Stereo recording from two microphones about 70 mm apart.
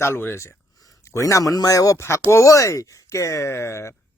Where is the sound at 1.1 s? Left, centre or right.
Left.